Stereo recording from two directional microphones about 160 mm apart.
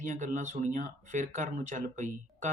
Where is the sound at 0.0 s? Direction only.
50° right (ahead or behind).